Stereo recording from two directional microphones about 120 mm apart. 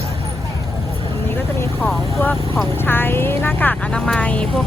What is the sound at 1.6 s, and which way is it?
Vehicle, 15° left (ahead or behind).